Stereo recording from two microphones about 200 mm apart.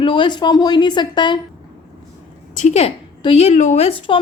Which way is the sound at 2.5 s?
35° left (ahead or behind).